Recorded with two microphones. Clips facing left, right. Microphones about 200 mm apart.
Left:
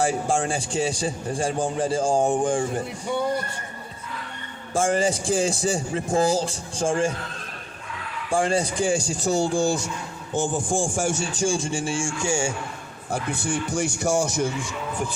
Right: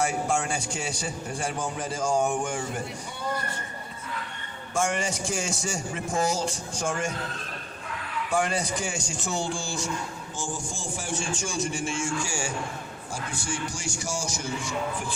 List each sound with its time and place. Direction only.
0.0 s a man's voice: 30° left (ahead or behind)
4.7 s a man's voice: 30° left (ahead or behind)
8.3 s a man's voice: 30° left (ahead or behind)
10.3 s a man's voice: 55° left (ahead or behind); by 12.5 s 25° left (ahead or behind)
13.1 s a man's voice: 60° left (ahead or behind)